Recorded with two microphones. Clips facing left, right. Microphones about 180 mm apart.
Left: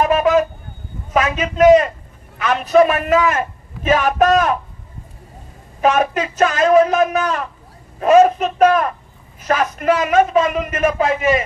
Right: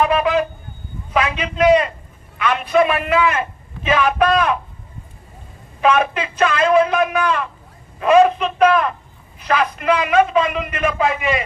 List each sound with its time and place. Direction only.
0.0 s a man's voice: 45° left (ahead or behind)
5.8 s a man's voice: 40° left (ahead or behind)